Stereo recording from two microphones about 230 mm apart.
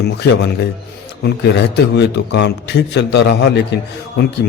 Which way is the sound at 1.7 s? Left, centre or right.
Left.